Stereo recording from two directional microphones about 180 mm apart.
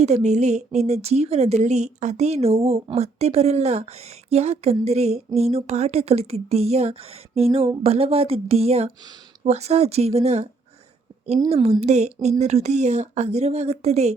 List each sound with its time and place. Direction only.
0.0 s a woman's voice: 40° right (ahead or behind)